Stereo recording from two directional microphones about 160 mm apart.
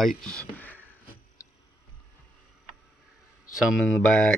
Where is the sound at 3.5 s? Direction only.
Centre (ahead or behind).